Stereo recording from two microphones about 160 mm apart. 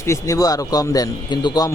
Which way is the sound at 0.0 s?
20° left (ahead or behind).